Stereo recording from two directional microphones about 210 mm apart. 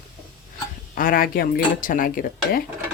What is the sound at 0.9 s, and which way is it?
Speech, 40° left (ahead or behind).